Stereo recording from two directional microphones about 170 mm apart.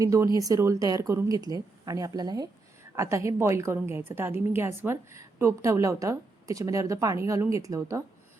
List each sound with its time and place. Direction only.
0.0 s a woman's voice: 20° right (ahead or behind)